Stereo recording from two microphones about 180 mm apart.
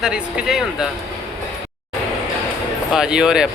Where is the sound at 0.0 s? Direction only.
5° right (ahead or behind).